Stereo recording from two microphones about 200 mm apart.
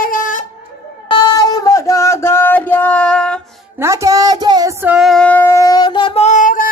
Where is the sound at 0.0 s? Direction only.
45° left (ahead or behind).